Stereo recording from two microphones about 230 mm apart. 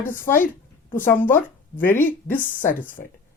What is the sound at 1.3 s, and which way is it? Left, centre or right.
Speech, left.